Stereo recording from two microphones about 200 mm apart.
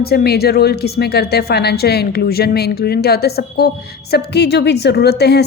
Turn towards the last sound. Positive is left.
turn(degrees=55)  # may be behind; listen again after turning